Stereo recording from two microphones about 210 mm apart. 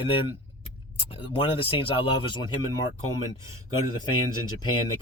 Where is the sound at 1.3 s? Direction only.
25° left (ahead or behind).